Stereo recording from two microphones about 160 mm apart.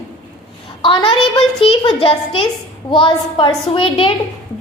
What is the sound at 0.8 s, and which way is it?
A woman's voice, 30° left (ahead or behind).